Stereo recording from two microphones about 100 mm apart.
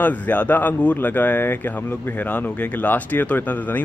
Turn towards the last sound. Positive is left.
turn(degrees=15)  # may be behind; listen again after turning